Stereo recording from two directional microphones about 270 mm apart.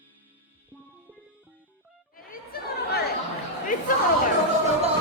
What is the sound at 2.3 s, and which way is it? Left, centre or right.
Chatter, left.